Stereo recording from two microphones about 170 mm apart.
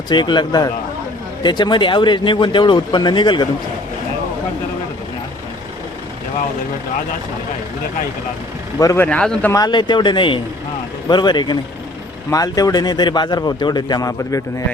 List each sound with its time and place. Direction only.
0.1 s speech: 25° left (ahead or behind)
8.8 s speech: 20° left (ahead or behind)
9.0 s speech: 5° left (ahead or behind)
9.5 s speech: 25° left (ahead or behind)